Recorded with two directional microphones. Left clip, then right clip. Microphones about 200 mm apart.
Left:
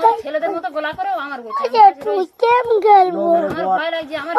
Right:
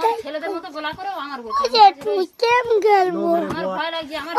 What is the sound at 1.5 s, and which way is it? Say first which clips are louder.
A child's voice: left 2 dB; 45° right (ahead or behind).